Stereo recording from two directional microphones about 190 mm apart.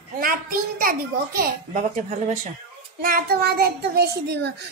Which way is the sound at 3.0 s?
50° right (ahead or behind).